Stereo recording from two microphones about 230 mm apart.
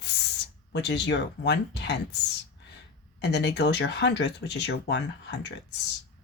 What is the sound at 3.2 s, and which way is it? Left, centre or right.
Speech, left.